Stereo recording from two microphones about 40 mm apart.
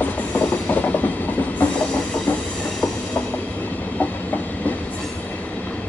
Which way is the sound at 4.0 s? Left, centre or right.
Left.